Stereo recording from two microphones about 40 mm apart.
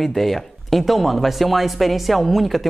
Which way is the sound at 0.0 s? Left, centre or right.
Centre.